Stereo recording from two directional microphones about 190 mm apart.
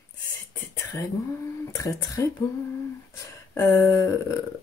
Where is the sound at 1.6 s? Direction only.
15° left (ahead or behind).